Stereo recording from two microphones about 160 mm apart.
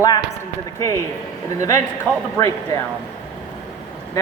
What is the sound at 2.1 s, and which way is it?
Speech, 5° left (ahead or behind).